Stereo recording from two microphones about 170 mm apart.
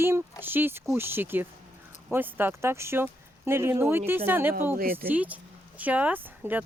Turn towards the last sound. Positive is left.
turn(degrees=-10)  # may be behind; listen again after turning